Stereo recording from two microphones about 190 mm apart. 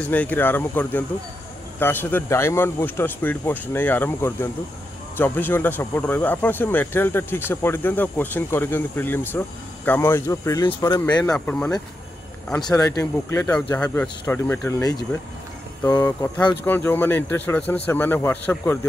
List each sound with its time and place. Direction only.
0.1 s speech: 10° left (ahead or behind)
11.2 s speech: 5° left (ahead or behind)
12.6 s speech: 20° left (ahead or behind)